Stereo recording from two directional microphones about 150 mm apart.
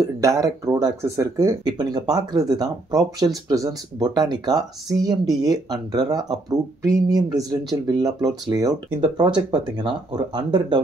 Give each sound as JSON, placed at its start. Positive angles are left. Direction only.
{"t": 0.2, "sound": "speech", "side_deg": -20}